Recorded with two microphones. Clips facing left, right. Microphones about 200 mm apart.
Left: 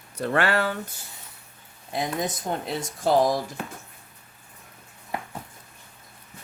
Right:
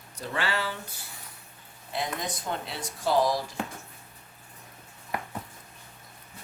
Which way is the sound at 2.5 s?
40° left (ahead or behind).